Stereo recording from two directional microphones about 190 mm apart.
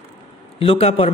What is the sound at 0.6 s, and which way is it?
Speech, 30° left (ahead or behind).